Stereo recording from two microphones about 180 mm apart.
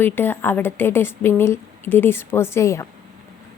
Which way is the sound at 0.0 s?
10° left (ahead or behind).